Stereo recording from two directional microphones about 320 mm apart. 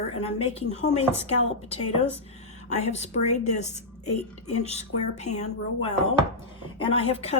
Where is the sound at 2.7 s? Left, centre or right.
Left.